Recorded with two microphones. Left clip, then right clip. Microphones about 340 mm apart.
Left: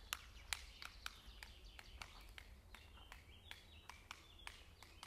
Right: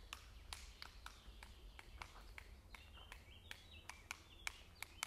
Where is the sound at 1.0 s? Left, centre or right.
Centre.